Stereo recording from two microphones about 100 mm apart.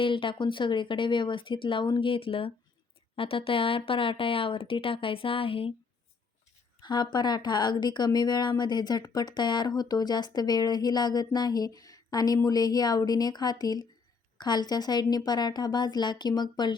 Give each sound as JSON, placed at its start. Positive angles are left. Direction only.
{"t": 0.0, "sound": "speech", "side_deg": 60}
{"t": 6.8, "sound": "speech", "side_deg": 45}